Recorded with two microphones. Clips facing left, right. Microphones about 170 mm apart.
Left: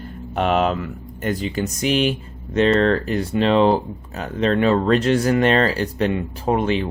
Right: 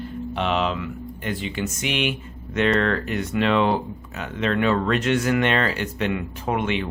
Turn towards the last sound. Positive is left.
turn(degrees=35)  # may be behind; listen again after turning